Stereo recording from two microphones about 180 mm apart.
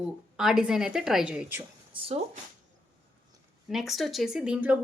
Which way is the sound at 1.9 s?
30° right (ahead or behind).